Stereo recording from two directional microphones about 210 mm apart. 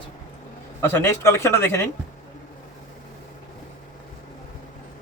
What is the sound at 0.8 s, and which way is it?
Speech, 10° left (ahead or behind).